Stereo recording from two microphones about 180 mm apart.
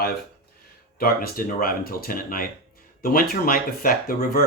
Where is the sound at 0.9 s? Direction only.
55° left (ahead or behind).